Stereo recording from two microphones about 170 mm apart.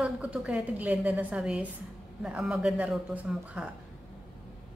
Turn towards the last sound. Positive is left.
turn(degrees=-5)  # may be behind; listen again after turning